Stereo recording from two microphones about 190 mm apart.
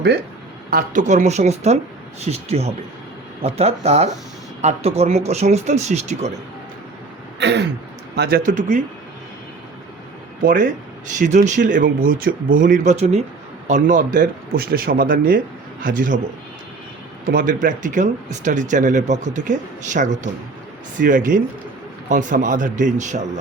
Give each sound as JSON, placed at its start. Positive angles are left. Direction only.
{"t": 0.7, "sound": "speech", "side_deg": -45}
{"t": 7.3, "sound": "throat clearing", "side_deg": -65}
{"t": 8.1, "sound": "speech", "side_deg": -60}
{"t": 8.4, "sound": "speech", "side_deg": -40}
{"t": 10.4, "sound": "speech", "side_deg": -45}
{"t": 17.2, "sound": "speech", "side_deg": -45}